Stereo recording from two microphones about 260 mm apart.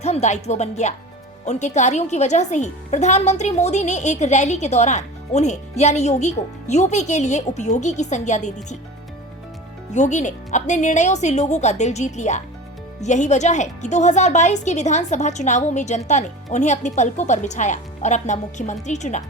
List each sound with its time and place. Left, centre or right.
0.0 s speech: left
9.9 s speech: left